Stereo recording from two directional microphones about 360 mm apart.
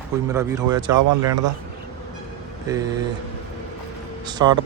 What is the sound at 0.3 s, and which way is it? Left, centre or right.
Speech, centre.